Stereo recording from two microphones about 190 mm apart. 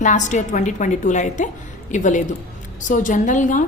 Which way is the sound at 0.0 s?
40° left (ahead or behind).